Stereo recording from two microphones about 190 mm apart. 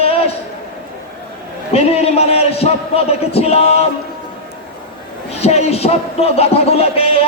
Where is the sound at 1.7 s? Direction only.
30° left (ahead or behind).